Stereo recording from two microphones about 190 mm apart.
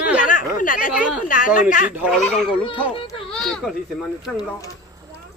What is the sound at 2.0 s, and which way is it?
Speech, centre (ahead or behind).